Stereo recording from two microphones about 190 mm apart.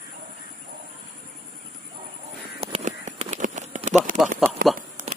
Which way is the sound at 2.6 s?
35° right (ahead or behind).